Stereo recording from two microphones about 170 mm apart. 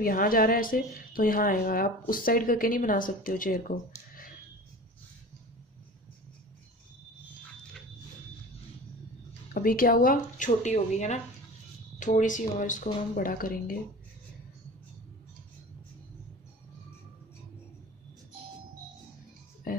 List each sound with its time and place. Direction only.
0.0 s speech: 55° left (ahead or behind)
9.5 s speech: 60° left (ahead or behind)
10.4 s speech: 45° left (ahead or behind)